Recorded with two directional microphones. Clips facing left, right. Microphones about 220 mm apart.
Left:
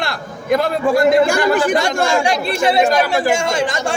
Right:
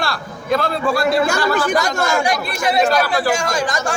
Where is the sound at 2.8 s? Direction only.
15° left (ahead or behind).